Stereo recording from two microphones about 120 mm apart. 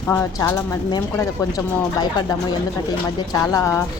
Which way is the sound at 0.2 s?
25° left (ahead or behind).